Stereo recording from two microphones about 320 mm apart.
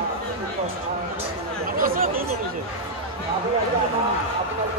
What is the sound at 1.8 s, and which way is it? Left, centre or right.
Speech, right.